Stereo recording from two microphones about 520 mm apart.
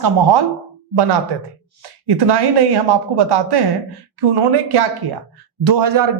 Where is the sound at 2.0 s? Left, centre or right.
Right.